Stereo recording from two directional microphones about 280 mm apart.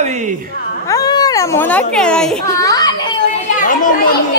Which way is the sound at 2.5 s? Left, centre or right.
Centre.